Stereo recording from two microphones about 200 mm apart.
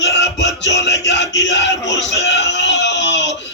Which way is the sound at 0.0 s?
60° left (ahead or behind).